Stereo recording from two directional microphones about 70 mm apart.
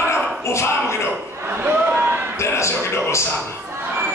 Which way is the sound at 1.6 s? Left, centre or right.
Right.